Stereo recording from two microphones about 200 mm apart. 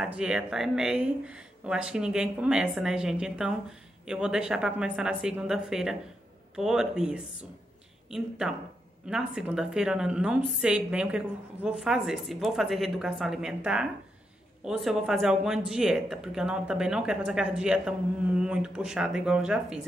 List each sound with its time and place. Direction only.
0.0 s speech: 5° right (ahead or behind)